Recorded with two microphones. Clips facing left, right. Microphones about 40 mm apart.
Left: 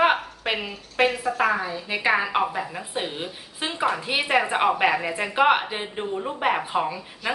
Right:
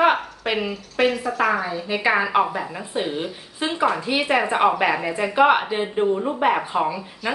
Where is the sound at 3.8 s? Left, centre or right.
Centre.